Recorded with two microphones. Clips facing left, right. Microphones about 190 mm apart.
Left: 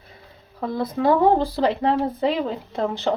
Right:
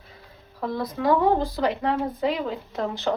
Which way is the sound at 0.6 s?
25° left (ahead or behind).